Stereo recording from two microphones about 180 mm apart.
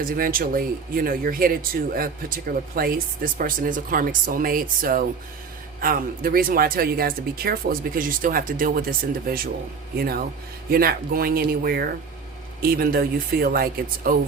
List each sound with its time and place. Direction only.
0.0 s speech: 50° right (ahead or behind)
10.7 s speech: 55° right (ahead or behind)